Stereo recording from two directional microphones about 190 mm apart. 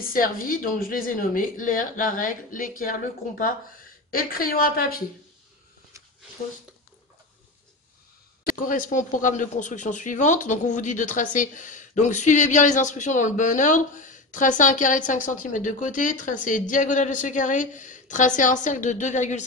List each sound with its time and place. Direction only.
0.1 s speech: 45° left (ahead or behind)
8.5 s speech: 45° left (ahead or behind)